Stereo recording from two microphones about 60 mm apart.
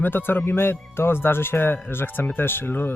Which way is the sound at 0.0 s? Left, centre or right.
Left.